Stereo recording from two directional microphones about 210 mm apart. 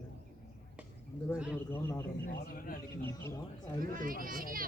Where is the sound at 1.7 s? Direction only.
10° left (ahead or behind).